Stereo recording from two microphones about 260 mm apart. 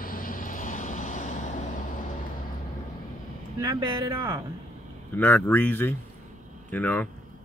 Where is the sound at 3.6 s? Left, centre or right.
Centre.